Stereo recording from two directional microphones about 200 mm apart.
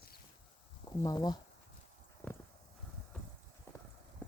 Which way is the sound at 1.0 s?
20° left (ahead or behind).